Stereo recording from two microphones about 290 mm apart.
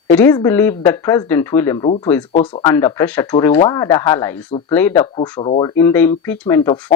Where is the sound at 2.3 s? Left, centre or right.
Left.